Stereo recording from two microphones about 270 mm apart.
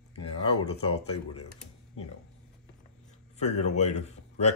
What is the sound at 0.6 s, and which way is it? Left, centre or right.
Speech, left.